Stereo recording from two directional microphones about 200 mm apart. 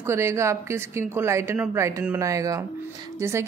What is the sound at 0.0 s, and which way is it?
A woman's voice, 15° right (ahead or behind).